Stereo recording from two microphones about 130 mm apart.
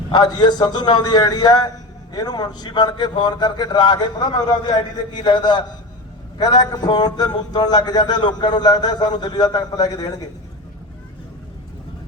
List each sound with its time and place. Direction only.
0.1 s a man's voice: 35° left (ahead or behind)